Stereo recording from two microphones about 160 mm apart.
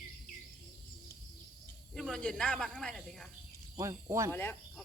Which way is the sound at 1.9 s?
5° left (ahead or behind).